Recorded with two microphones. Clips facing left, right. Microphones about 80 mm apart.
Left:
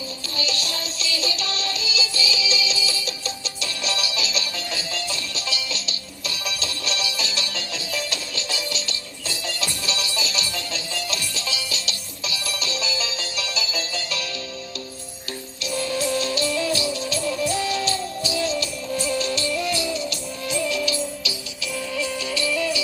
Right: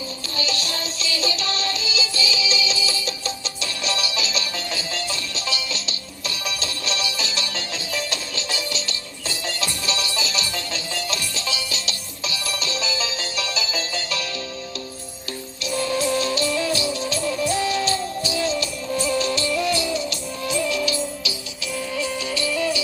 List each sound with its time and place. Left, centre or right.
0.3 s music: right
15.6 s music: right
20.1 s music: right